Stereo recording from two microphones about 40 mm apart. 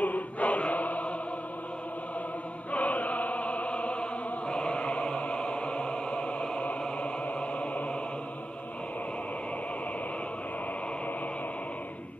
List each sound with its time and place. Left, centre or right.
0.0 s choir: left
2.7 s choir: left
7.0 s music: left